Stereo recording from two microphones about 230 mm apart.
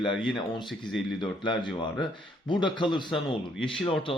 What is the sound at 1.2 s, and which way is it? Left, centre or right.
Speech, left.